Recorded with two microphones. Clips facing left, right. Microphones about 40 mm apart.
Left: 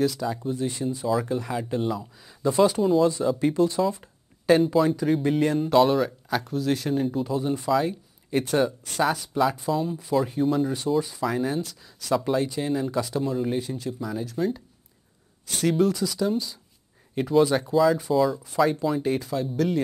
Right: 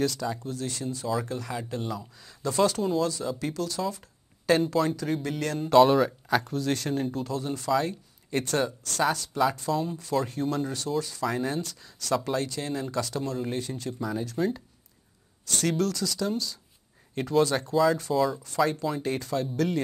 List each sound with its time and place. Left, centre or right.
0.0 s speech: centre
4.5 s speech: centre
5.2 s speech: centre
5.6 s speech: centre
11.2 s speech: centre
18.1 s speech: centre